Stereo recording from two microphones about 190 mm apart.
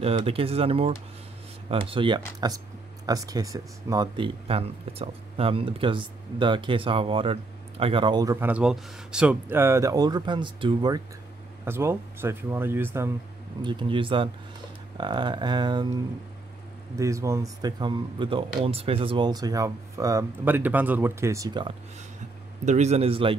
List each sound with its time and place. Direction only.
0.0 s speech: 30° right (ahead or behind)
11.6 s speech: 10° right (ahead or behind)
13.6 s speech: 25° right (ahead or behind)
22.7 s speech: 35° right (ahead or behind)